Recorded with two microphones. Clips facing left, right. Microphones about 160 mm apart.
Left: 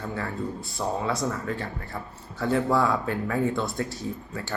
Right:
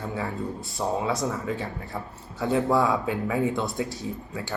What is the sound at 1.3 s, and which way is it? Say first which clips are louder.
Speech: right 1 dB; 10° right (ahead or behind).